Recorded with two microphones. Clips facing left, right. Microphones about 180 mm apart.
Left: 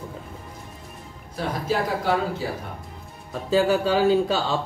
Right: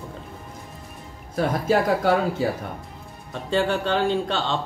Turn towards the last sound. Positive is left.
turn(degrees=5)  # may be behind; listen again after turning